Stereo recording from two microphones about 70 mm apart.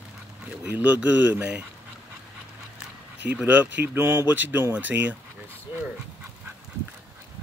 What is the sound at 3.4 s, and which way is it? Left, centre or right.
Speech, right.